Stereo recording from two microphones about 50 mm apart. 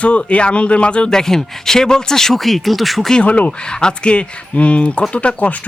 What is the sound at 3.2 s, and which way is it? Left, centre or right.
Speech, left.